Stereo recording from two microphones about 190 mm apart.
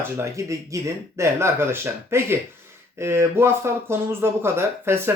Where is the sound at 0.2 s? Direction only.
15° right (ahead or behind).